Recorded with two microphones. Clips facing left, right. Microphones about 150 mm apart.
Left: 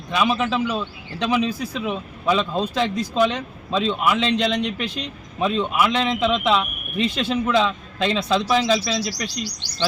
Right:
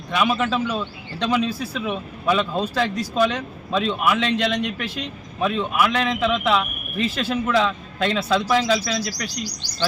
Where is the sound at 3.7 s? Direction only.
10° right (ahead or behind).